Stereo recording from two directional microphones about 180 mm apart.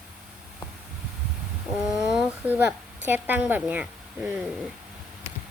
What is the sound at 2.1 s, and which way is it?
Speech, 5° right (ahead or behind).